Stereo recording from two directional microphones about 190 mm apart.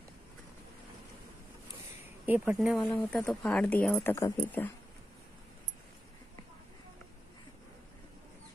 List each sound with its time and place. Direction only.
2.2 s speech: 10° right (ahead or behind); by 4.6 s 10° left (ahead or behind)